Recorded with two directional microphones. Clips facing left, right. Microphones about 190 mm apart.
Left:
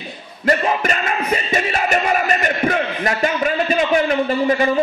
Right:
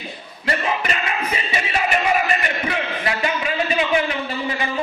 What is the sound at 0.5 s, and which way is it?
Music, 45° left (ahead or behind).